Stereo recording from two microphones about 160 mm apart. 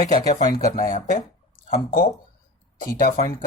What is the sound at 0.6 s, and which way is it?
Speech, 50° left (ahead or behind).